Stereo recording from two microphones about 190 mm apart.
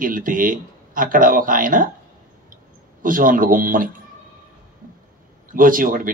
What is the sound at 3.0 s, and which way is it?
Speech, 45° right (ahead or behind).